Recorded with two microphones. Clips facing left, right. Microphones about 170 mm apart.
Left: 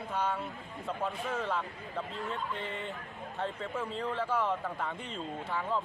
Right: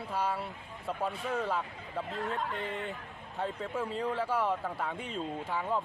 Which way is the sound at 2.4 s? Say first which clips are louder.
Right 2 dB; 90° right.